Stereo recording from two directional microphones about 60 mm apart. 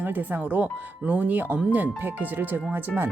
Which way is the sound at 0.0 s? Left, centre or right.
Right.